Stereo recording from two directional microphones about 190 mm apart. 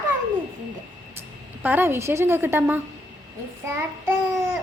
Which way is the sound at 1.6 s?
10° right (ahead or behind).